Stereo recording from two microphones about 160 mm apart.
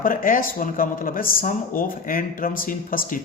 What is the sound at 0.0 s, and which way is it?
Speech, 60° left (ahead or behind).